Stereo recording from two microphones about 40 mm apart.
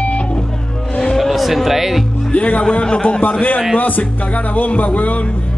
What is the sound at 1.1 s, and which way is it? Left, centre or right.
Speech, centre.